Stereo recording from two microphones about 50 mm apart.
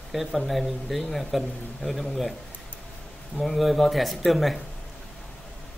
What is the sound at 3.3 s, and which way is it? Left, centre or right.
Speech, centre.